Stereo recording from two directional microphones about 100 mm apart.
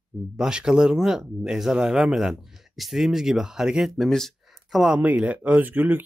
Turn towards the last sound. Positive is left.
turn(degrees=-20)  # may be behind; listen again after turning